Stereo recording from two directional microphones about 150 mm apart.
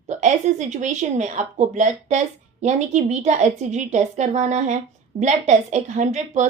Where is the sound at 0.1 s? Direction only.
50° right (ahead or behind).